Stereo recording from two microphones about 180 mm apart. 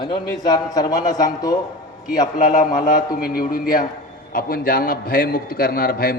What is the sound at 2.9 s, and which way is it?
A man's voice, 55° left (ahead or behind).